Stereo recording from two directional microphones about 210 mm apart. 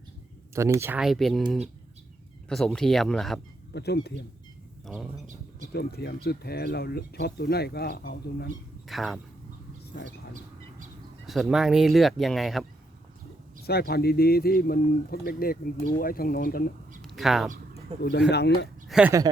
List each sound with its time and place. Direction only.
0.5 s speech: 15° right (ahead or behind)
3.7 s speech: 50° left (ahead or behind)
4.9 s speech: centre (ahead or behind)
5.7 s speech: 50° left (ahead or behind)
8.9 s speech: centre (ahead or behind)
11.3 s speech: centre (ahead or behind)
13.6 s speech: 50° left (ahead or behind)
17.0 s a sound: centre (ahead or behind)
18.3 s speech: 50° left (ahead or behind)
18.9 s speech: 5° right (ahead or behind)